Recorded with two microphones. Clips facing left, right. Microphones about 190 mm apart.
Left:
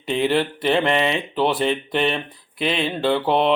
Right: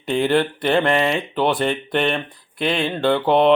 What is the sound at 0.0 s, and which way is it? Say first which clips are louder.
Speech: right 2 dB; centre (ahead or behind).